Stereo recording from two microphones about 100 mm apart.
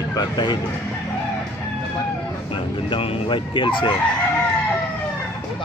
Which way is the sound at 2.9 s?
65° left (ahead or behind).